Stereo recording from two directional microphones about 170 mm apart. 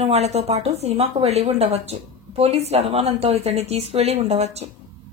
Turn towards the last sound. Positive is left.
turn(degrees=-40)  # may be behind; listen again after turning